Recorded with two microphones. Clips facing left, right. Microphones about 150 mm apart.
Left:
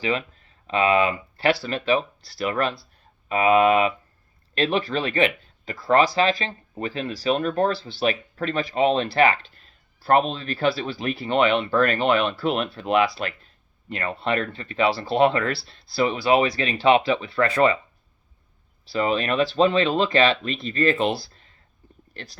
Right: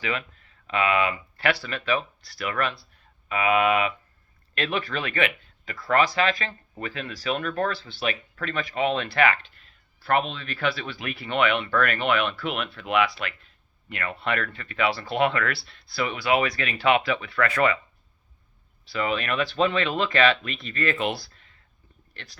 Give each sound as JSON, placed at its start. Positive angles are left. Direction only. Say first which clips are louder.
{"t": 0.0, "sound": "speech", "louder": "left 5 dB", "side_deg": 30}
{"t": 18.9, "sound": "speech", "louder": "left 4 dB", "side_deg": 35}